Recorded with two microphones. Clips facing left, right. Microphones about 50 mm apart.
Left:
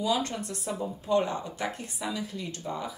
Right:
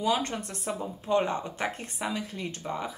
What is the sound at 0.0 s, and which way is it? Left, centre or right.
Speech, right.